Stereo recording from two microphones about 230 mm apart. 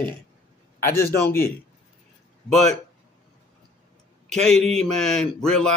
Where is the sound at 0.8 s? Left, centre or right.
Centre.